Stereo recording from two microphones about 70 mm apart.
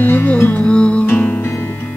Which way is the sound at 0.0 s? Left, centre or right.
Left.